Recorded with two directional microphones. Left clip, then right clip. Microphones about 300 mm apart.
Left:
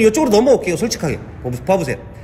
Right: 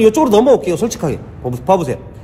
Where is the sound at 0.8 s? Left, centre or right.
Centre.